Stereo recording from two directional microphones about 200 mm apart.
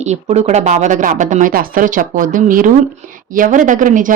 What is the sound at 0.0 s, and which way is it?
Speech, 35° right (ahead or behind).